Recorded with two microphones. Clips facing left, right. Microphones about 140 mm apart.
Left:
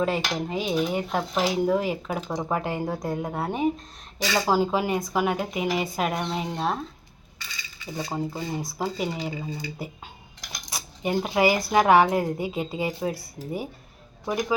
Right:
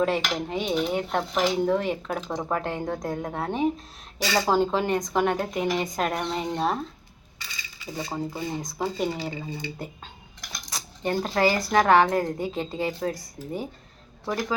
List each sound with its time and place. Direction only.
0.0 s dishes: centre (ahead or behind)
8.1 s dishes: 10° left (ahead or behind)
10.7 s a sound: 10° left (ahead or behind)
11.7 s a woman's voice: 10° left (ahead or behind)